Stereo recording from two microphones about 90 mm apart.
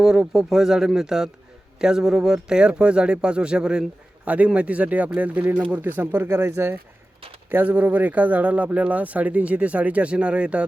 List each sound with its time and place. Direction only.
0.0 s a man's voice: 5° right (ahead or behind); by 6.7 s 30° right (ahead or behind)
7.5 s a man's voice: 15° right (ahead or behind)